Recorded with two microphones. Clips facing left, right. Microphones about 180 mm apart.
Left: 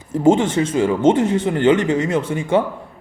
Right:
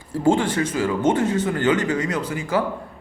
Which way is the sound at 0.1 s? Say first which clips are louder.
Left 4 dB; 20° left (ahead or behind).